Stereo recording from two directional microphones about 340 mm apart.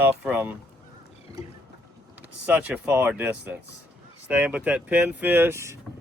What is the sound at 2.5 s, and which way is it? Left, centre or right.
Speech, centre.